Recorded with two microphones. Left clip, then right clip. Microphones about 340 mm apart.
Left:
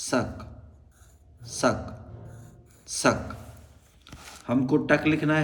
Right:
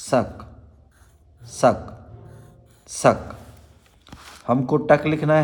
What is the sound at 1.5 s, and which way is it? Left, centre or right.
A man's voice, centre.